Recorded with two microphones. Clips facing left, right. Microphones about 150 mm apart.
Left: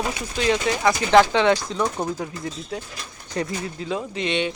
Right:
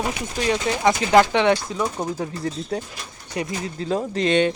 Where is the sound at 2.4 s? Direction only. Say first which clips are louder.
Right 4 dB; 40° right (ahead or behind).